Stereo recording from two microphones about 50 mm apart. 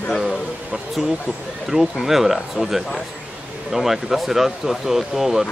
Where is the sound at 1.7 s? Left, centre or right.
Right.